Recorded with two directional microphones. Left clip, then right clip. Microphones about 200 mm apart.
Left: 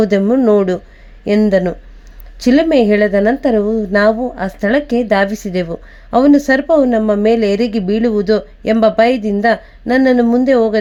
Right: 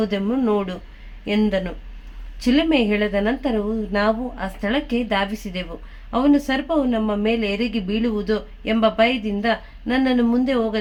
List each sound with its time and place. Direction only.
0.0 s a woman's voice: 40° left (ahead or behind)